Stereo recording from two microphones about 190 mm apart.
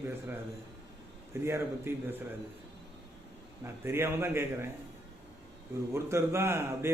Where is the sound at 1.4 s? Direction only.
15° right (ahead or behind).